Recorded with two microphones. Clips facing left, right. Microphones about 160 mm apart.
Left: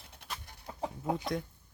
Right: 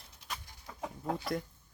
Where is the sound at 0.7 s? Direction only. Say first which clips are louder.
Left 4 dB; 30° left (ahead or behind).